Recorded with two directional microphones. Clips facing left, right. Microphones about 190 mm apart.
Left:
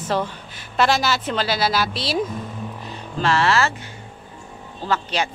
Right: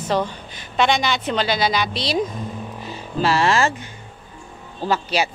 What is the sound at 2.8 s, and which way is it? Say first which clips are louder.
Music: right 4 dB; centre (ahead or behind).